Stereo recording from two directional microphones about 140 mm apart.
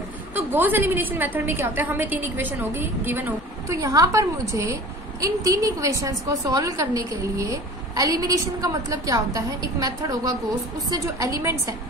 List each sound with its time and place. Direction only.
0.5 s a woman's voice: 15° right (ahead or behind)